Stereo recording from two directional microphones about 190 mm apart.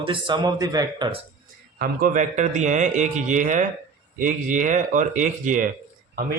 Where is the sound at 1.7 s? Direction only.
50° right (ahead or behind).